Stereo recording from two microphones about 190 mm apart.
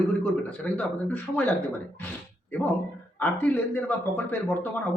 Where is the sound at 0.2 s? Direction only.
5° left (ahead or behind).